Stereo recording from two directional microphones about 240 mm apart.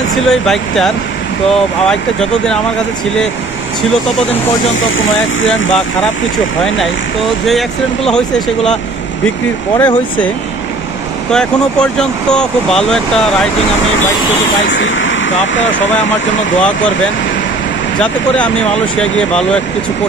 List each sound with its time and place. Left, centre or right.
0.3 s speech: centre
4.7 s speech: left
7.4 s speech: centre
9.8 s speech: centre
11.3 s speech: centre
14.7 s speech: left
15.6 s speech: left
18.0 s speech: centre